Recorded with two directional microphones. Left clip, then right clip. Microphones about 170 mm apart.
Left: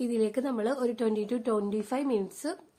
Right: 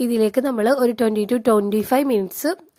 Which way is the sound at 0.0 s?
50° right (ahead or behind).